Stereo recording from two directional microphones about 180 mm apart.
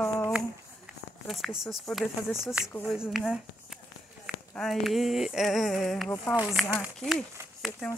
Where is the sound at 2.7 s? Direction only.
10° left (ahead or behind).